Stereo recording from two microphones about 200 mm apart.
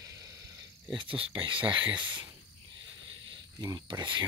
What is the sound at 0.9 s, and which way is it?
Speech, 25° right (ahead or behind).